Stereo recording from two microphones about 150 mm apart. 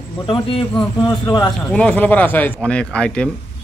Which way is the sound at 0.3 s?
35° left (ahead or behind).